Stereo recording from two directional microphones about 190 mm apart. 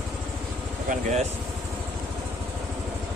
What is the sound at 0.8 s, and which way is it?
Speech, 40° right (ahead or behind).